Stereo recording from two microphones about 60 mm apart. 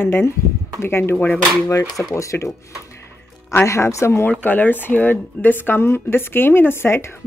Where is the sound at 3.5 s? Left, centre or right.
Left.